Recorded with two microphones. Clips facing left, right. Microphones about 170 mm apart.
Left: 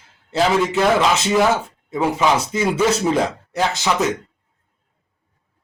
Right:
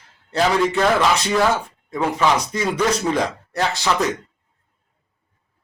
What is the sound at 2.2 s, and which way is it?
Speech, 10° left (ahead or behind).